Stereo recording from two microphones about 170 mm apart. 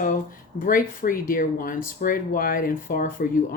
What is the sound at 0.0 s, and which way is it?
Speech, 55° left (ahead or behind).